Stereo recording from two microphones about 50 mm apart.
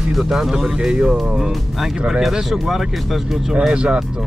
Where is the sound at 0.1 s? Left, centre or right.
Centre.